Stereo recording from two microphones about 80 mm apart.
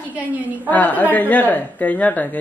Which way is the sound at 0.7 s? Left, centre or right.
Left.